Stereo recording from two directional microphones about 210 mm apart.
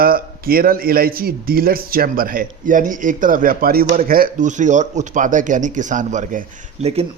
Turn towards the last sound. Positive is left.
turn(degrees=-30)  # may be behind; listen again after turning